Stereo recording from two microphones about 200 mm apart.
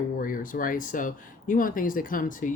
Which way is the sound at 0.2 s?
45° left (ahead or behind).